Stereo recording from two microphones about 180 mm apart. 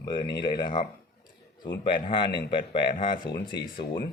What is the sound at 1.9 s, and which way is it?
Speech, 25° left (ahead or behind).